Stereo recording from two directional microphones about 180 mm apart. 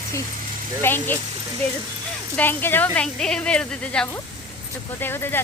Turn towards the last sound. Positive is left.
turn(degrees=10)  # may be behind; listen again after turning